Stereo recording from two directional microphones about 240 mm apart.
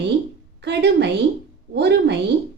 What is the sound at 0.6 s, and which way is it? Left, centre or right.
A woman's voice, right.